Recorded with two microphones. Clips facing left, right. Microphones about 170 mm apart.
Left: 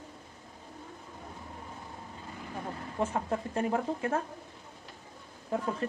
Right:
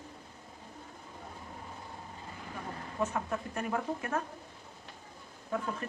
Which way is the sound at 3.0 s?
30° left (ahead or behind).